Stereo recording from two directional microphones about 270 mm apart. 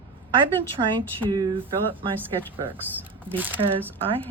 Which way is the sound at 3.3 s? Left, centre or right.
Centre.